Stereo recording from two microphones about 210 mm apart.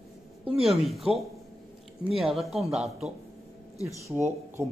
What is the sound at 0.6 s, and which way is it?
A man's voice, centre (ahead or behind).